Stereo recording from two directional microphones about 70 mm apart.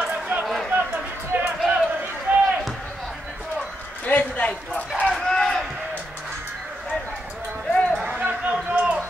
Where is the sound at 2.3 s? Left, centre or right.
Right.